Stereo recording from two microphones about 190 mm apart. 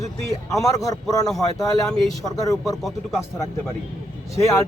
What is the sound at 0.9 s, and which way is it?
Speech, 20° left (ahead or behind).